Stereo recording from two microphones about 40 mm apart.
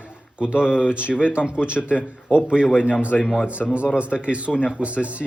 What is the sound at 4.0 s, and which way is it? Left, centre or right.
Speech, right.